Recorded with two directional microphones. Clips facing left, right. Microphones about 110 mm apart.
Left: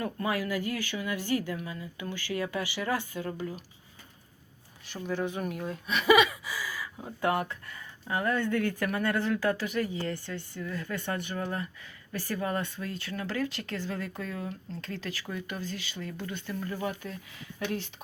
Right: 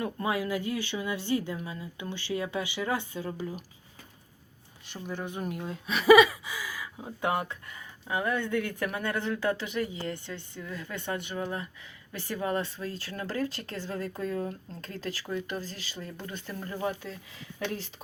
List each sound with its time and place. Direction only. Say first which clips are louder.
0.0 s speech: right 1 dB; 20° right (ahead or behind)
4.9 s speech: left 4 dB; 10° right (ahead or behind)
5.4 s speech: left 1 dB; 25° right (ahead or behind)
6.5 s speech: left 1 dB; 15° right (ahead or behind); by 17.0 s 35° right (ahead or behind)